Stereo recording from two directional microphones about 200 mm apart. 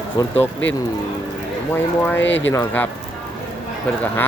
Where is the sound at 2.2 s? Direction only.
65° left (ahead or behind).